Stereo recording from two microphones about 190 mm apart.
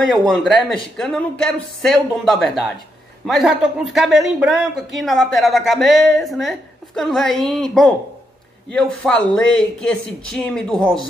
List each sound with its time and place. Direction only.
0.0 s speech: centre (ahead or behind)